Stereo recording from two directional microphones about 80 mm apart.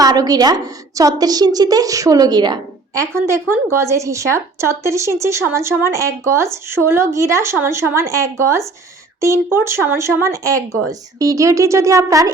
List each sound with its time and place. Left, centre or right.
0.0 s a woman's voice: right
2.9 s speech: right
10.2 s speech: right